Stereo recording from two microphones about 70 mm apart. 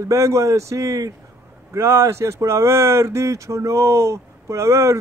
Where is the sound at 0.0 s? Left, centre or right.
Right.